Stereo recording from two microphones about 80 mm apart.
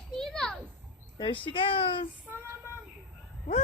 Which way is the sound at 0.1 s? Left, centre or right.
Centre.